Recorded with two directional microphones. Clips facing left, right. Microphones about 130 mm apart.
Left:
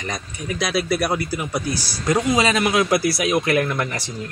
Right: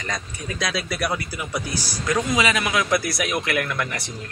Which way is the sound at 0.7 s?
35° left (ahead or behind).